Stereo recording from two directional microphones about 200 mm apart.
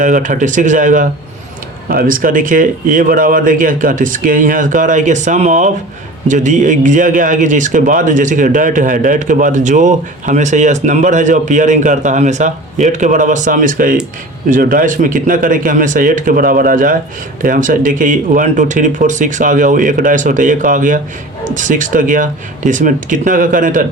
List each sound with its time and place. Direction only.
0.0 s speech: 40° right (ahead or behind)